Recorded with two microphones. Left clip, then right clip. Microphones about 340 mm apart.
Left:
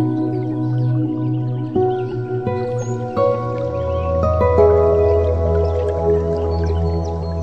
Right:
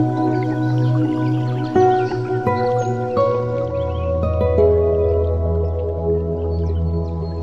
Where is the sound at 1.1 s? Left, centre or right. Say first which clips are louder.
Right 2 dB; right.